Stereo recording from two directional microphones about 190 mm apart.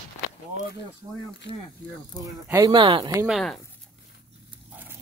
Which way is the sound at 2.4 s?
15° right (ahead or behind).